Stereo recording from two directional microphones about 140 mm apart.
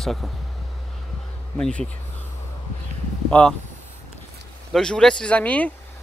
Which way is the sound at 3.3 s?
10° left (ahead or behind).